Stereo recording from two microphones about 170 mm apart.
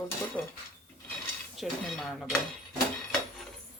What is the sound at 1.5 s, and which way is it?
Speech, centre (ahead or behind).